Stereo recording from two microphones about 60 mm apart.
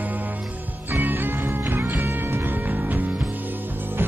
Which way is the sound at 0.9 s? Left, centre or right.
Right.